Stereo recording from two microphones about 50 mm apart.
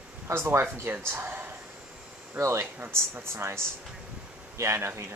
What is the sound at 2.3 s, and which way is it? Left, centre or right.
Speech, right.